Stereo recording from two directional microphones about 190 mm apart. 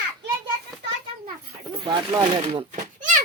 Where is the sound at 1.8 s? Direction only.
20° right (ahead or behind).